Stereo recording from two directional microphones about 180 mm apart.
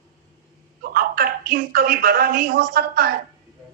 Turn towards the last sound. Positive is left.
turn(degrees=-55)  # may be behind; listen again after turning